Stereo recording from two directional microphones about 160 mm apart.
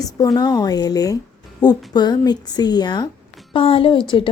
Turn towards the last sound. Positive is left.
turn(degrees=35)  # may be behind; listen again after turning